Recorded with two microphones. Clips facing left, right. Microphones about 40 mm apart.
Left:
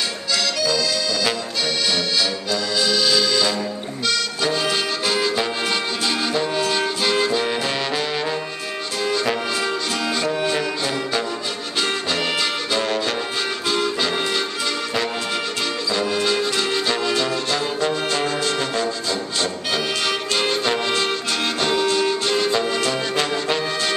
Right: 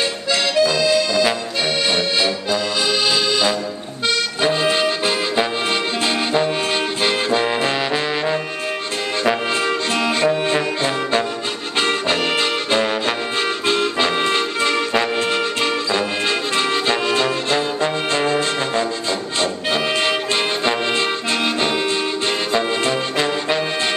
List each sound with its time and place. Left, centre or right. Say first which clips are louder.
0.3 s accordion: right 5 dB; right
3.1 s music: right 1 dB; right
9.7 s music: right 4 dB; right
13.7 s music: right 3 dB; right
20.6 s accordion: right 2 dB; right
21.5 s music: even; right